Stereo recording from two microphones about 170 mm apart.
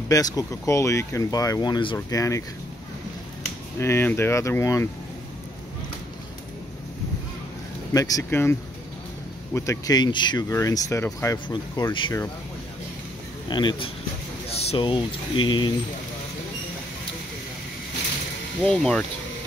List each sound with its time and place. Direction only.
0.1 s speech: 20° left (ahead or behind)
3.8 s speech: 15° left (ahead or behind)
7.9 s speech: 20° left (ahead or behind)
11.3 s speech: 30° left (ahead or behind)
13.5 s speech: 25° left (ahead or behind)
14.5 s speech: 35° left (ahead or behind)
18.6 s speech: 5° left (ahead or behind)